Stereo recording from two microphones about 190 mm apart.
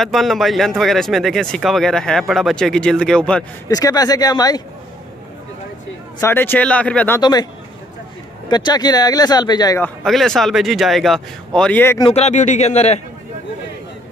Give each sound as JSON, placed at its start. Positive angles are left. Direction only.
{"t": 0.0, "sound": "speech", "side_deg": 0}
{"t": 3.6, "sound": "speech", "side_deg": 20}
{"t": 6.1, "sound": "speech", "side_deg": 10}
{"t": 7.2, "sound": "speech", "side_deg": 20}
{"t": 8.5, "sound": "speech", "side_deg": 20}
{"t": 10.0, "sound": "speech", "side_deg": 0}
{"t": 12.0, "sound": "a man's voice", "side_deg": 35}